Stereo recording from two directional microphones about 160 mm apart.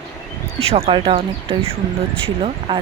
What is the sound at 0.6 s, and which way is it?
Speech, 40° right (ahead or behind).